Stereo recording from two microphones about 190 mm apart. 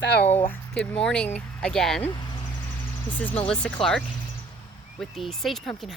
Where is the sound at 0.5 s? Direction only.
10° left (ahead or behind).